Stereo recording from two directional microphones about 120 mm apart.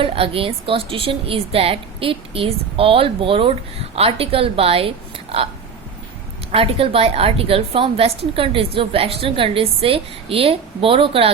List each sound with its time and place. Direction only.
0.0 s a woman's voice: 50° right (ahead or behind)
6.5 s a woman's voice: 50° right (ahead or behind)